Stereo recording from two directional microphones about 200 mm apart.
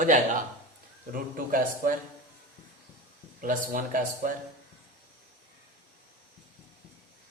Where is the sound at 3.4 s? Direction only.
40° right (ahead or behind).